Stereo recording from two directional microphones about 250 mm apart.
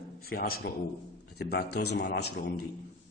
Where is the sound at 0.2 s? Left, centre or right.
Left.